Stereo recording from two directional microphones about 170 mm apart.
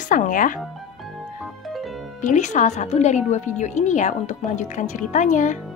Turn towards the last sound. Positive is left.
turn(degrees=45)  # may be behind; listen again after turning